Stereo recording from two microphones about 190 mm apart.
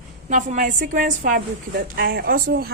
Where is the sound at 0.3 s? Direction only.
40° right (ahead or behind).